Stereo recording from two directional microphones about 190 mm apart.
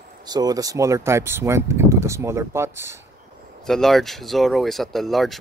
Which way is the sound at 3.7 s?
Centre (ahead or behind).